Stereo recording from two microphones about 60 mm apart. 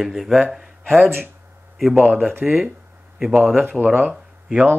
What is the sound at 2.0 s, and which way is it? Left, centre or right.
Speech, right.